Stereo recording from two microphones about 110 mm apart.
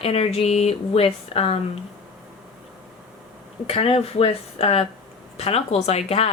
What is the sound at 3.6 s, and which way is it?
A woman's voice, 65° left (ahead or behind).